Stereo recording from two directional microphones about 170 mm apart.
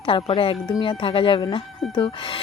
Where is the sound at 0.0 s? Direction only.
30° left (ahead or behind).